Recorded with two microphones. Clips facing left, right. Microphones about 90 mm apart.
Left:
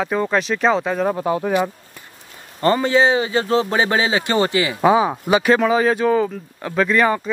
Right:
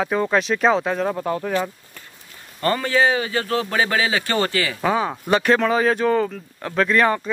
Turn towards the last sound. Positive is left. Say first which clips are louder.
# left 1 dB
turn(degrees=0)  # may be behind; listen again after turning